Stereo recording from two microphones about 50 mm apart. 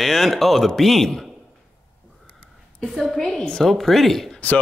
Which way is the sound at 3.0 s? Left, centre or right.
Centre.